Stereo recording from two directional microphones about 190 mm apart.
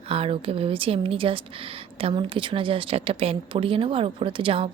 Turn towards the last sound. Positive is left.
turn(degrees=-30)  # may be behind; listen again after turning